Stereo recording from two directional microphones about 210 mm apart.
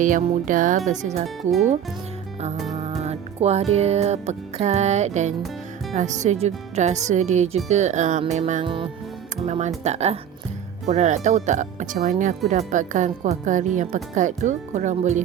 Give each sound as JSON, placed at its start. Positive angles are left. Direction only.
{"t": 0.0, "sound": "speech", "side_deg": -40}
{"t": 1.4, "sound": "speech", "side_deg": 0}
{"t": 2.7, "sound": "music", "side_deg": -30}
{"t": 5.9, "sound": "speech", "side_deg": -35}